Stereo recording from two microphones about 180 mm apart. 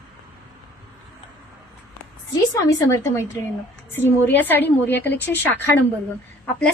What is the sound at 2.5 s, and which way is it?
A woman's voice, 15° left (ahead or behind).